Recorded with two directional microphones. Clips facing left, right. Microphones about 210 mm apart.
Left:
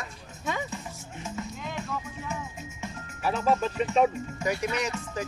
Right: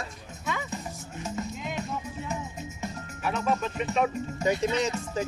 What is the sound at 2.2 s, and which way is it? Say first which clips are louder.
Music: right 2 dB; 40° right (ahead or behind).